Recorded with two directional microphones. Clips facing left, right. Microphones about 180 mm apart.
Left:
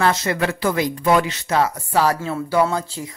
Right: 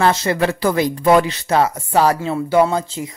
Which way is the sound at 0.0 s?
30° right (ahead or behind).